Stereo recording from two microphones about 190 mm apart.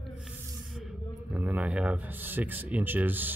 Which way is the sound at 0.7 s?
5° right (ahead or behind).